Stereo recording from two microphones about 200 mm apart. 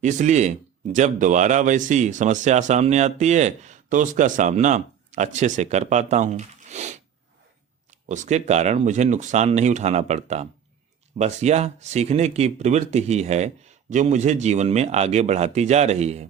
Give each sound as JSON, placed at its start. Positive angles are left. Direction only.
{"t": 0.0, "sound": "speech", "side_deg": -35}
{"t": 8.0, "sound": "speech", "side_deg": -35}